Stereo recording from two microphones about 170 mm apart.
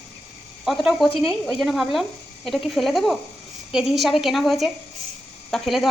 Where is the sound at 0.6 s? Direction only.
Centre (ahead or behind).